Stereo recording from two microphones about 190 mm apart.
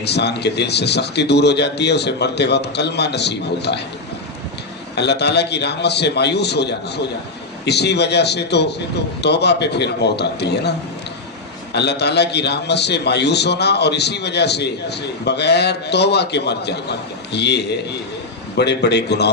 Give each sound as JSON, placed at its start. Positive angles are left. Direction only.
{"t": 0.0, "sound": "a man's voice", "side_deg": 60}
{"t": 4.9, "sound": "a man's voice", "side_deg": 60}